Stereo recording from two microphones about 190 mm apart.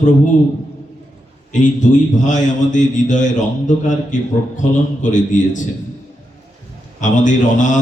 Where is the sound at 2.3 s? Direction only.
40° left (ahead or behind).